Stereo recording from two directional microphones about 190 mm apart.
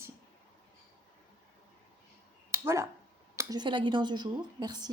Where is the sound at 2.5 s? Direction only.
15° right (ahead or behind).